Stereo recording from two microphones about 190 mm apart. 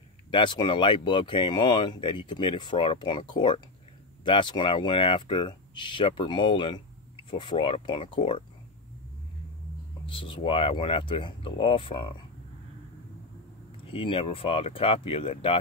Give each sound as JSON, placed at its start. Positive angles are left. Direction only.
{"t": 0.3, "sound": "speech", "side_deg": 25}
{"t": 10.0, "sound": "speech", "side_deg": 25}
{"t": 13.8, "sound": "speech", "side_deg": 30}